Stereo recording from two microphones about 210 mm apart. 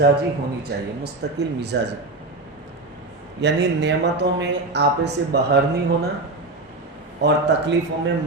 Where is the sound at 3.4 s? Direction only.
55° right (ahead or behind).